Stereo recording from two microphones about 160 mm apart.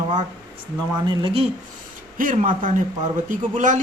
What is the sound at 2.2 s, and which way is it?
A man's voice, 55° right (ahead or behind).